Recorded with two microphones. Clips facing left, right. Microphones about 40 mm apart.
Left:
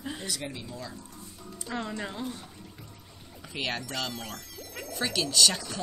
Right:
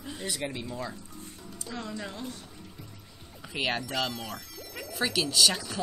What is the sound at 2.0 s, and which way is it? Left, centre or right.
Speech, centre.